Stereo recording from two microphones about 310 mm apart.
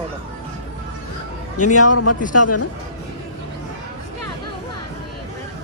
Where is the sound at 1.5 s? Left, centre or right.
Left.